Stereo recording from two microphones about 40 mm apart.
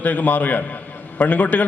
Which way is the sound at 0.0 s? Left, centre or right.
Left.